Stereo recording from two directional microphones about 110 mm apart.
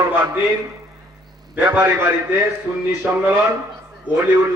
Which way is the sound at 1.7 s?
15° right (ahead or behind).